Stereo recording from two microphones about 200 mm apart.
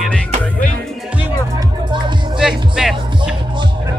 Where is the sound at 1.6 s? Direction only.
25° right (ahead or behind).